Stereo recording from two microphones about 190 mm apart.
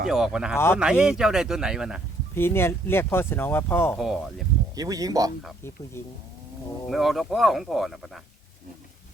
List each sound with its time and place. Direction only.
0.1 s speech: centre (ahead or behind)
0.5 s speech: 15° left (ahead or behind)
0.8 s speech: 5° right (ahead or behind)
2.3 s speech: 10° left (ahead or behind)
3.9 s speech: centre (ahead or behind)
4.7 s speech: 20° right (ahead or behind)
6.8 s speech: centre (ahead or behind)